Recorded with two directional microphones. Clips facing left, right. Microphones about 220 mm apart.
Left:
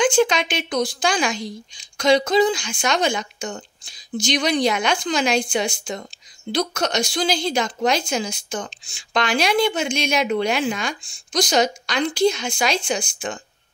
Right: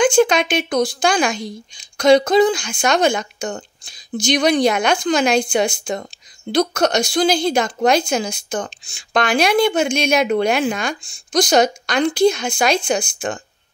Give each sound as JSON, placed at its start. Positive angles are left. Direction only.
{"t": 0.0, "sound": "a woman's voice", "side_deg": -50}